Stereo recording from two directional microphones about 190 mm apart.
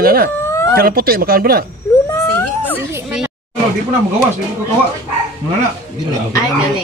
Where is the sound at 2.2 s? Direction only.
10° left (ahead or behind).